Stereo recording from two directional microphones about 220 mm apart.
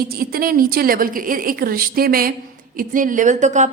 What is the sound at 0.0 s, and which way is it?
Speech, 45° right (ahead or behind).